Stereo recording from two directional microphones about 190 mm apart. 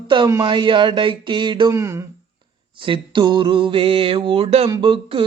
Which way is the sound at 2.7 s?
25° right (ahead or behind).